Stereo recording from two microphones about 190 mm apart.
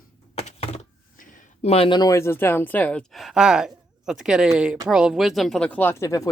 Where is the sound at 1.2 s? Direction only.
45° left (ahead or behind).